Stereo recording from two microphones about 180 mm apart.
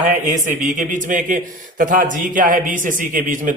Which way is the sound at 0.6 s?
45° right (ahead or behind).